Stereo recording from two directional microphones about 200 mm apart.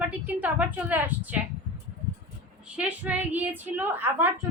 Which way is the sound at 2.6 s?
5° right (ahead or behind).